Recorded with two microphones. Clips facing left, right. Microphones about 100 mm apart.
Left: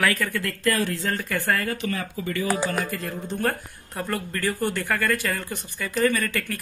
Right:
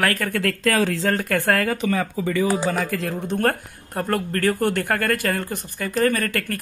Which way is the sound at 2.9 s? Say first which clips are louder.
Right 5 dB; 90° right.